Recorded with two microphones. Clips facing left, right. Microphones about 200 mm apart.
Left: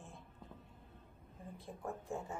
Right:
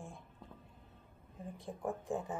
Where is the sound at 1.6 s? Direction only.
15° right (ahead or behind).